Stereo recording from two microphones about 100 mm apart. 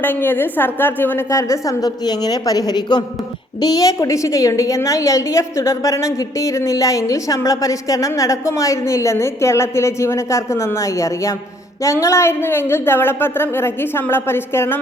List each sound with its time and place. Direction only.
0.0 s a woman's voice: 20° left (ahead or behind)
1.3 s a woman's voice: 30° left (ahead or behind)